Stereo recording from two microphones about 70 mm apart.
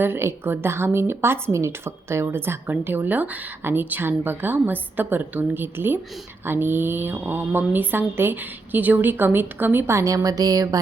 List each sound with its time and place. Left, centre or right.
0.0 s a woman's voice: right